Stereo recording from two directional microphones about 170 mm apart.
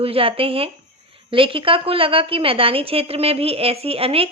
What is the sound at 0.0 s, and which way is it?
A woman's voice, 35° right (ahead or behind).